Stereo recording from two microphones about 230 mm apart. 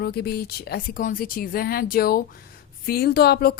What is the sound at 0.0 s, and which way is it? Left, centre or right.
A woman's voice, left.